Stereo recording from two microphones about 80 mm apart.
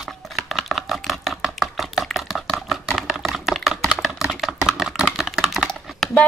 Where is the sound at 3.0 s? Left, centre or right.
Centre.